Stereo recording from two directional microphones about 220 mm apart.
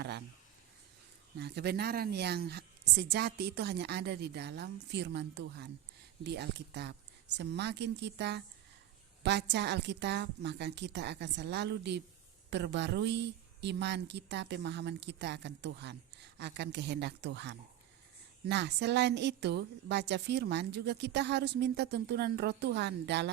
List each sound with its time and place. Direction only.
1.4 s speech: 50° right (ahead or behind)